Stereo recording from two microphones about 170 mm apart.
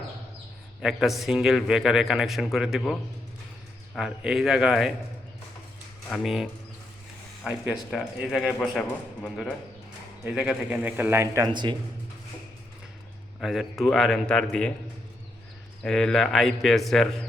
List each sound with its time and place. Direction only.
0.8 s a man's voice: centre (ahead or behind)
6.2 s a man's voice: centre (ahead or behind); by 11.8 s 25° right (ahead or behind)
13.4 s a man's voice: centre (ahead or behind)
15.8 s a man's voice: 5° left (ahead or behind)